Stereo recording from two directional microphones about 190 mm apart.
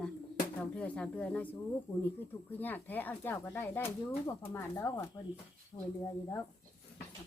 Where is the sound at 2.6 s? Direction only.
10° left (ahead or behind).